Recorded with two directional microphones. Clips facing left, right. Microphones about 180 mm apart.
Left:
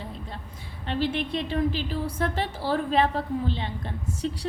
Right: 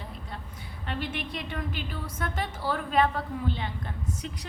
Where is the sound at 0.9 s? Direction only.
30° left (ahead or behind).